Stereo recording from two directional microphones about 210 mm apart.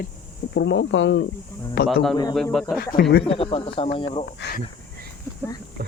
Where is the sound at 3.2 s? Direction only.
25° left (ahead or behind).